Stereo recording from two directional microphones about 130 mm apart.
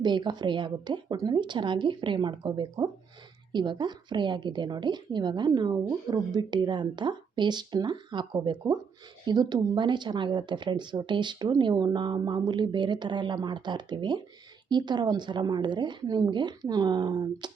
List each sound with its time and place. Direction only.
0.0 s speech: 35° right (ahead or behind)